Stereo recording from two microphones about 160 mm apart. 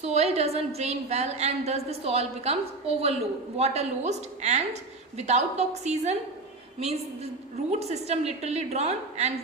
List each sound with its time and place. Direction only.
0.0 s a woman's voice: 40° right (ahead or behind)
7.7 s a woman's voice: 40° right (ahead or behind)